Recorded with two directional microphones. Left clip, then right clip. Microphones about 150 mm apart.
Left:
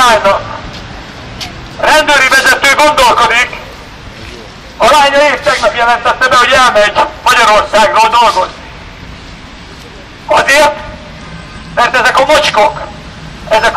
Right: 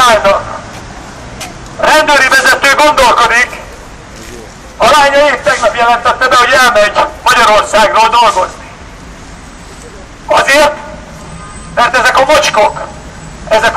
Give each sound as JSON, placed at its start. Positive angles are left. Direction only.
{"t": 0.0, "sound": "speech", "side_deg": -15}
{"t": 1.8, "sound": "a sound", "side_deg": -10}
{"t": 4.7, "sound": "a man's voice", "side_deg": -15}
{"t": 10.2, "sound": "a man's voice", "side_deg": -10}
{"t": 11.7, "sound": "a man's voice", "side_deg": -15}
{"t": 13.5, "sound": "a sound", "side_deg": -10}